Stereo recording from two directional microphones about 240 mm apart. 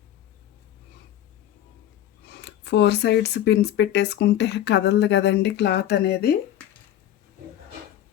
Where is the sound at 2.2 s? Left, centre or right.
Left.